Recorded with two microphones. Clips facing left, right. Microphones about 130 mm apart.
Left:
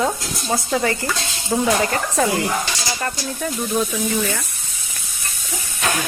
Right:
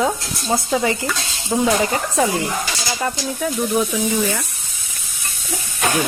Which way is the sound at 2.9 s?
5° right (ahead or behind).